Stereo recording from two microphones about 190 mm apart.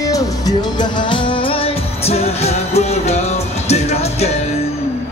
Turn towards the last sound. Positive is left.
turn(degrees=35)  # may be behind; listen again after turning